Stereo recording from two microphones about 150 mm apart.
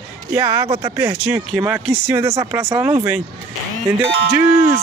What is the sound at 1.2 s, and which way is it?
Speech, 10° right (ahead or behind).